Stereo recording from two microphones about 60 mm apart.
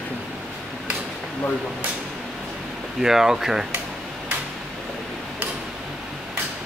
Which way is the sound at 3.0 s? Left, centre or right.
Centre.